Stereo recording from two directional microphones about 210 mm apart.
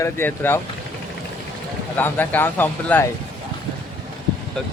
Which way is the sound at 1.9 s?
10° left (ahead or behind).